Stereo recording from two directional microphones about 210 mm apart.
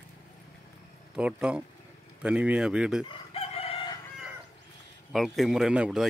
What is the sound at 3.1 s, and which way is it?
Chicken, 30° left (ahead or behind).